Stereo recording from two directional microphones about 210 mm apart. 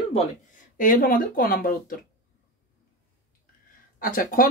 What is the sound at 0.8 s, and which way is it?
Speech, 40° left (ahead or behind).